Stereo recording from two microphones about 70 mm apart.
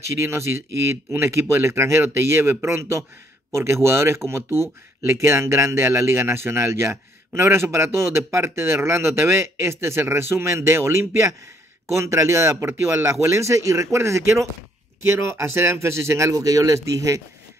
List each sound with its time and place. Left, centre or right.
0.1 s speech: right